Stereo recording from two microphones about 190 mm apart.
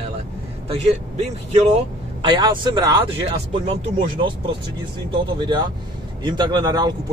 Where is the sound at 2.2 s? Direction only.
25° right (ahead or behind).